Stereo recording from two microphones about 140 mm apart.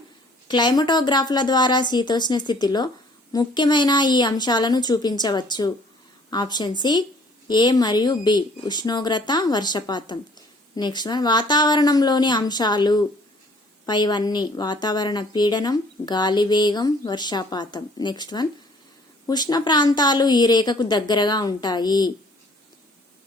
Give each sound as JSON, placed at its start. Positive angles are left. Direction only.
{"t": 0.4, "sound": "a woman's voice", "side_deg": 30}